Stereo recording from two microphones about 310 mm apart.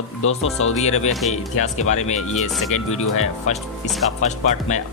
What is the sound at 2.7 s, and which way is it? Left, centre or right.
Speech, left.